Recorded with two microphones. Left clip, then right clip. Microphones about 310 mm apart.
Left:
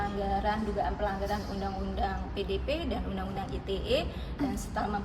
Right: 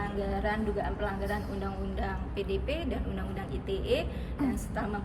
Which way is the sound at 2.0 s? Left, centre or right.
Centre.